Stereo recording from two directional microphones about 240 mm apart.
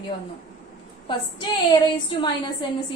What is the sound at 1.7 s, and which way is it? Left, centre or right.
Speech, centre.